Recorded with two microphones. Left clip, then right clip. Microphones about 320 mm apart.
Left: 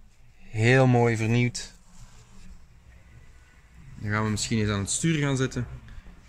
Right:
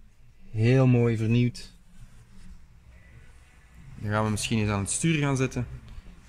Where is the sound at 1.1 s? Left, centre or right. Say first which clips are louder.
Left 1 dB; left.